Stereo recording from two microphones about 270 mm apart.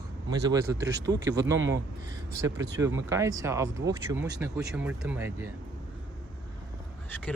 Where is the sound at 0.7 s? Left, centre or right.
Centre.